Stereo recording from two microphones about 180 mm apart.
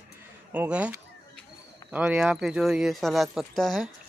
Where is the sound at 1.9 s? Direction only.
5° right (ahead or behind).